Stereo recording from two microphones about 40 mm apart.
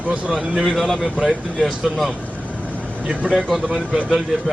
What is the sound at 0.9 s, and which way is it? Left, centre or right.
Speech, centre.